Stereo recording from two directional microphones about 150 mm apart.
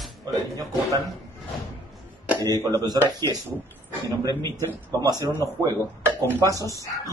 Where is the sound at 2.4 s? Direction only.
25° right (ahead or behind).